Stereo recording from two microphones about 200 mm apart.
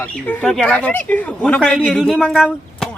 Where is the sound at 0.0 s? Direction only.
5° left (ahead or behind).